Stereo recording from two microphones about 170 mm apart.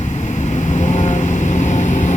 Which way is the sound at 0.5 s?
45° left (ahead or behind).